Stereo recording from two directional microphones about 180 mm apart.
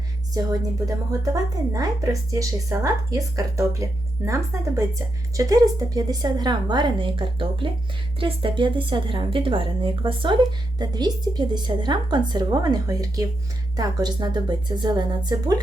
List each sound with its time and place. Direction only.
0.4 s speech: 20° right (ahead or behind)